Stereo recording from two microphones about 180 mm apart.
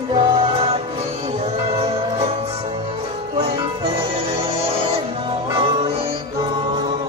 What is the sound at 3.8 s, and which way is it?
Music, 30° right (ahead or behind).